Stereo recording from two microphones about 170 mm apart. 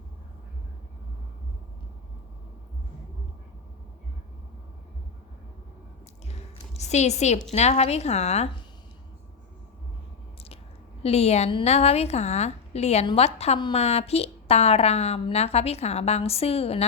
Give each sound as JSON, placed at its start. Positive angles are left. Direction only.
{"t": 6.2, "sound": "a sound", "side_deg": 40}
{"t": 7.5, "sound": "a woman's voice", "side_deg": 40}
{"t": 11.0, "sound": "a woman's voice", "side_deg": 40}